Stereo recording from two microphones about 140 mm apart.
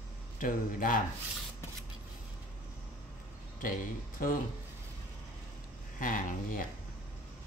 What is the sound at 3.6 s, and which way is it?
Speech, 80° left.